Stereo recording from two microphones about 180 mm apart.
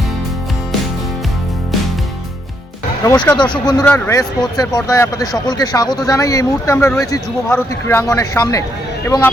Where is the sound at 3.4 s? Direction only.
25° left (ahead or behind).